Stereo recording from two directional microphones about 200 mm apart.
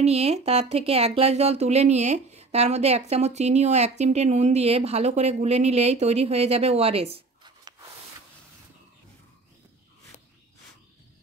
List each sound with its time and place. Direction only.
0.0 s speech: 30° right (ahead or behind)